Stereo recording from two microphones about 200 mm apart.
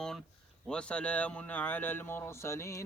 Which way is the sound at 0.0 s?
Centre (ahead or behind).